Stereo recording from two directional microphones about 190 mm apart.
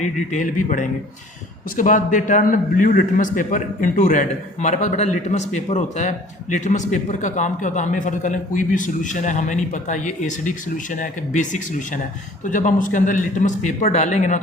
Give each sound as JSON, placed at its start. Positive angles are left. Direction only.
{"t": 0.0, "sound": "a man's voice", "side_deg": 40}